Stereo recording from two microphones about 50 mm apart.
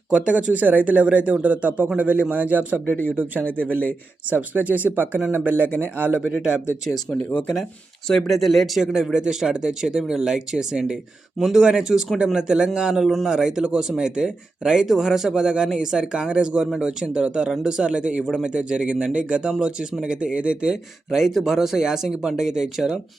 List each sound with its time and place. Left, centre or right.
0.1 s speech: right
6.1 s speech: centre
8.0 s speech: centre
8.8 s speech: centre
11.3 s speech: centre
11.6 s speech: centre